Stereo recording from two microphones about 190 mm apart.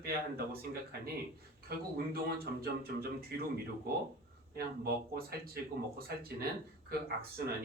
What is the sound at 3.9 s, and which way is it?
Speech, 55° right (ahead or behind).